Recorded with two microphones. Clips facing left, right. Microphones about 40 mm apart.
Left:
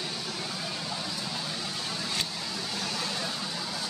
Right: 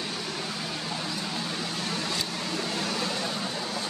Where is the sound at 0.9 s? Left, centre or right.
Centre.